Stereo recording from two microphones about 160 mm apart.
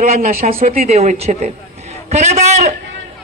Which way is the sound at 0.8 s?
40° right (ahead or behind).